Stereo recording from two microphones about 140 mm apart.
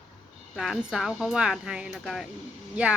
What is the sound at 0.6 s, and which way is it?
A woman's voice, centre (ahead or behind).